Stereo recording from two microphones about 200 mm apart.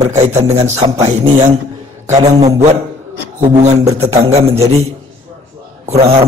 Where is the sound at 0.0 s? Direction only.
35° right (ahead or behind).